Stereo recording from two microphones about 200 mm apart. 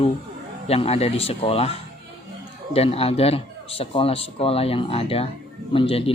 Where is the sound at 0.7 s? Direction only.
30° left (ahead or behind).